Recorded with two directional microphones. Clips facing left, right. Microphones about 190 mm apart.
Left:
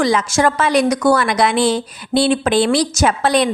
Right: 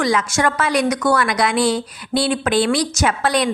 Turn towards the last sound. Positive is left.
turn(degrees=25)  # may be behind; listen again after turning